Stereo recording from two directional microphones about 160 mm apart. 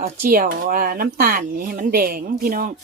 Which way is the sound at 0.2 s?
60° right (ahead or behind).